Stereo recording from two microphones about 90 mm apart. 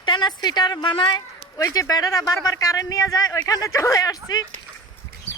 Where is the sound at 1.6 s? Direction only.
45° left (ahead or behind).